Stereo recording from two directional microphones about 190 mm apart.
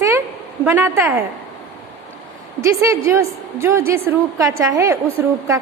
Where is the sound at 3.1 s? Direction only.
15° right (ahead or behind).